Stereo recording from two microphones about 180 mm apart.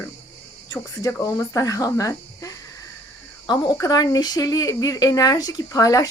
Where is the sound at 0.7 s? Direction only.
20° left (ahead or behind).